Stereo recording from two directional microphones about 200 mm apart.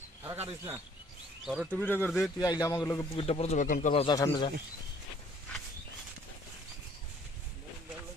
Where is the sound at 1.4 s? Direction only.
Centre (ahead or behind); by 4.5 s 25° left (ahead or behind).